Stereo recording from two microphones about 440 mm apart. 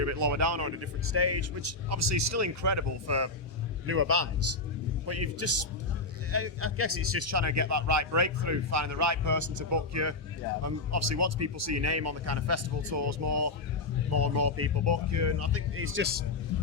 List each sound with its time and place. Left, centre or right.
0.0 s a man's voice: right